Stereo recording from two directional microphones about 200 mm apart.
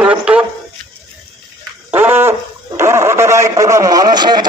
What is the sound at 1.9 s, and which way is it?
A man's voice, 10° right (ahead or behind).